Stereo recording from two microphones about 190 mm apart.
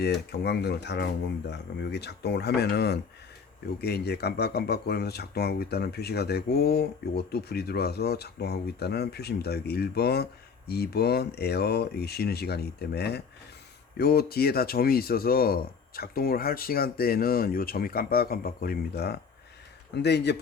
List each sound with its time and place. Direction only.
0.0 s speech: 60° left (ahead or behind)